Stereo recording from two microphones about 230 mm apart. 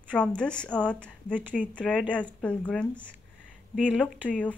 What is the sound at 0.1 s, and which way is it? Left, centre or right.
Speech, centre.